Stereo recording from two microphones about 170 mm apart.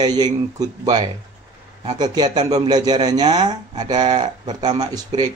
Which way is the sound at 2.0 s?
25° right (ahead or behind).